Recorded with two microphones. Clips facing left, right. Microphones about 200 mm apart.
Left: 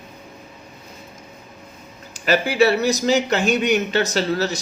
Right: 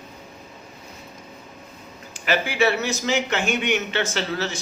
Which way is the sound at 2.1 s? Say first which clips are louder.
Left 5 dB; 40° left (ahead or behind).